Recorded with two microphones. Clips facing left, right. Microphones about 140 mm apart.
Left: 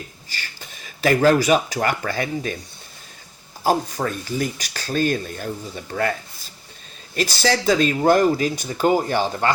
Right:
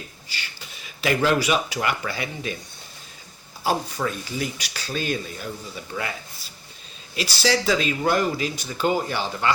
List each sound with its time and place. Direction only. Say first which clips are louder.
0.3 s speech: left 2 dB; 45° left (ahead or behind)
3.6 s speech: left 4 dB; 45° left (ahead or behind)